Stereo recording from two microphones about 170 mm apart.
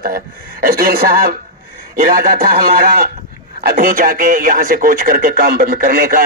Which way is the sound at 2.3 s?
60° right (ahead or behind).